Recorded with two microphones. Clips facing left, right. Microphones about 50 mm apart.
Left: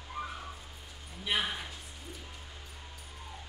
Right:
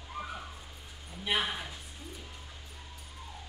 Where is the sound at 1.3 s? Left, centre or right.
Centre.